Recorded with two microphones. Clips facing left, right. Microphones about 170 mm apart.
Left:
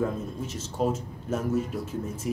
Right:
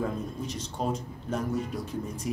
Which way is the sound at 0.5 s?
5° left (ahead or behind).